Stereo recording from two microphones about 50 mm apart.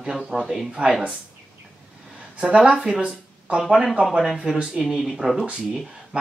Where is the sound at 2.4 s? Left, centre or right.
Right.